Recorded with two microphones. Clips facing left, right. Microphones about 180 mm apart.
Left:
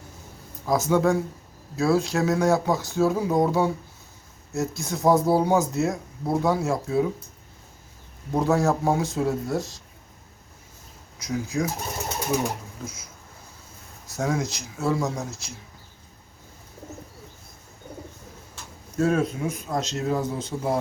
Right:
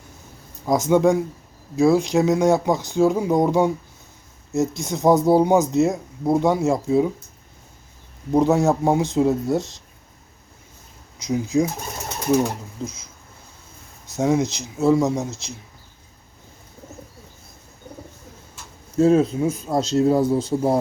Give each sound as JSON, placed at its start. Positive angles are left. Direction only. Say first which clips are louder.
{"t": 0.6, "sound": "speech", "louder": "right 4 dB", "side_deg": -20}
{"t": 8.3, "sound": "speech", "louder": "right 5 dB", "side_deg": -20}
{"t": 11.2, "sound": "speech", "louder": "right 6 dB", "side_deg": -20}
{"t": 12.8, "sound": "speech", "louder": "right 6 dB", "side_deg": -25}
{"t": 14.2, "sound": "speech", "louder": "right 7 dB", "side_deg": -20}
{"t": 18.9, "sound": "a man's voice", "louder": "right 7 dB", "side_deg": -25}